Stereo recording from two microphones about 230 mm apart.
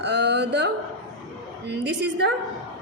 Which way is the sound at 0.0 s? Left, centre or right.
Right.